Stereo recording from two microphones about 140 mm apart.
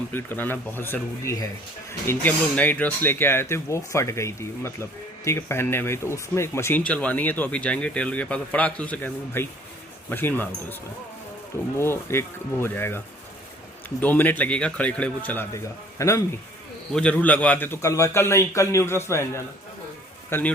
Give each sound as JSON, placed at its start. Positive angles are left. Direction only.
{"t": 0.1, "sound": "speech", "side_deg": 15}
{"t": 11.8, "sound": "speech", "side_deg": 15}
{"t": 14.0, "sound": "speech", "side_deg": 10}
{"t": 16.9, "sound": "a man's voice", "side_deg": 10}